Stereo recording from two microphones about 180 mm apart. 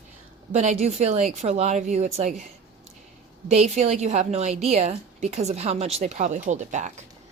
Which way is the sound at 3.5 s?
35° right (ahead or behind).